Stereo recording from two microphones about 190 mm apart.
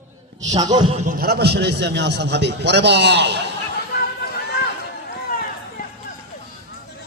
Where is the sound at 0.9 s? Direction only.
40° right (ahead or behind); by 3.5 s 65° right (ahead or behind).